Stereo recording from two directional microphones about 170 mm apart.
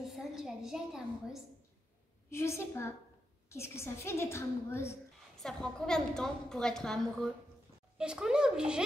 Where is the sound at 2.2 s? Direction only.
15° left (ahead or behind).